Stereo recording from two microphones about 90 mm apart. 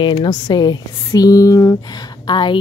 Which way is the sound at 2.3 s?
60° left (ahead or behind).